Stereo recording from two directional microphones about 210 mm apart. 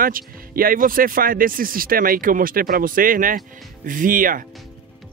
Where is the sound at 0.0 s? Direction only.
40° right (ahead or behind).